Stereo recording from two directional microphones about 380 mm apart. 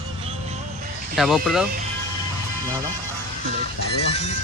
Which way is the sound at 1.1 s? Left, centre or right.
Centre.